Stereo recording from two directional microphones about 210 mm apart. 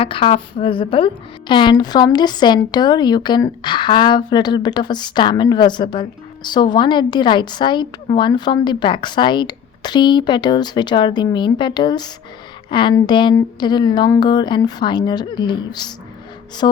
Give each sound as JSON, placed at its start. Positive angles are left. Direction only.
{"t": 0.0, "sound": "a woman's voice", "side_deg": 25}